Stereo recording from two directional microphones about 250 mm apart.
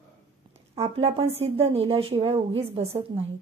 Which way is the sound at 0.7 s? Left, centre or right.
Right.